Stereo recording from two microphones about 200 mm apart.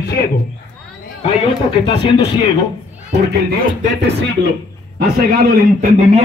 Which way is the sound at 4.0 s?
60° right (ahead or behind).